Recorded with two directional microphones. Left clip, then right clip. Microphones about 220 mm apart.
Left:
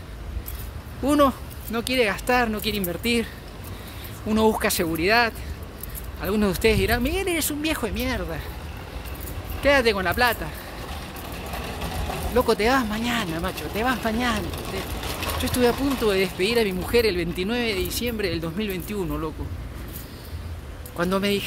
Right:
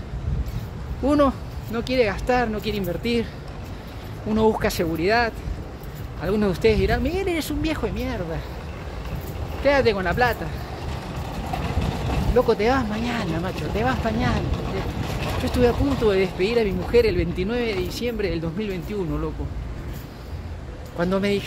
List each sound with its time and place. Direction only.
1.0 s speech: 15° left (ahead or behind)
4.3 s speech: 20° left (ahead or behind)
9.6 s speech: 15° left (ahead or behind)
12.4 s speech: 20° left (ahead or behind)
15.4 s speech: 20° left (ahead or behind)
21.0 s speech: 15° left (ahead or behind)